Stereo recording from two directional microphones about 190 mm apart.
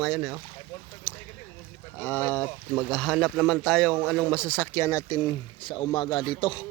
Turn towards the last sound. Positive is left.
turn(degrees=25)  # may be behind; listen again after turning